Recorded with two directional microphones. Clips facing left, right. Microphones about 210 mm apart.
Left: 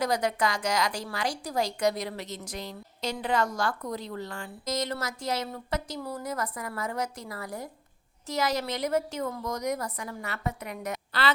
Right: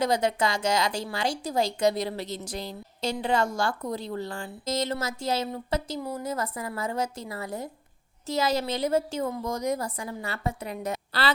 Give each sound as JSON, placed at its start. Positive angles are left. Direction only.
{"t": 0.0, "sound": "a woman's voice", "side_deg": -25}